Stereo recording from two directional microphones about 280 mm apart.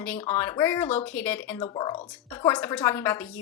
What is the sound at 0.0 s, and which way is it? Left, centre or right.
A woman's voice, centre.